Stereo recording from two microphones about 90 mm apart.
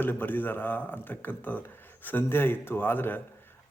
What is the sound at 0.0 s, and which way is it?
Speech, 20° left (ahead or behind).